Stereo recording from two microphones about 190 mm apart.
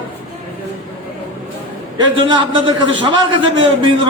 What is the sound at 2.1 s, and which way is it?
A man's voice, 25° right (ahead or behind).